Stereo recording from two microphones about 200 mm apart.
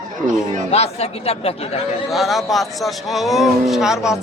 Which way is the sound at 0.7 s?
30° left (ahead or behind).